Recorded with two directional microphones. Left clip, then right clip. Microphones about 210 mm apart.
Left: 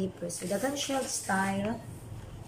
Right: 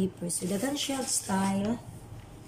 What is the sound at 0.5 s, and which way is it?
Speech, 20° right (ahead or behind).